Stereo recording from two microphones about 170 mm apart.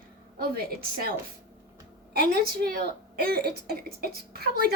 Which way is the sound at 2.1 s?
60° right (ahead or behind).